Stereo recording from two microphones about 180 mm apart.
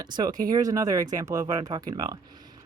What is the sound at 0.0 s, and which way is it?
Speech, 20° right (ahead or behind).